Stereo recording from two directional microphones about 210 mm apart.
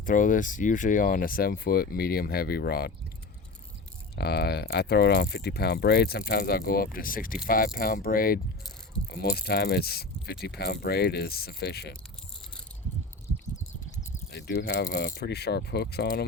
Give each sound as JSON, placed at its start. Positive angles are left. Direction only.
{"t": 0.0, "sound": "speech", "side_deg": 40}
{"t": 4.1, "sound": "speech", "side_deg": 50}
{"t": 14.3, "sound": "speech", "side_deg": 55}